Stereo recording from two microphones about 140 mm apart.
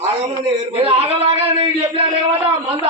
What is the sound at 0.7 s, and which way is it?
Speech, 40° right (ahead or behind).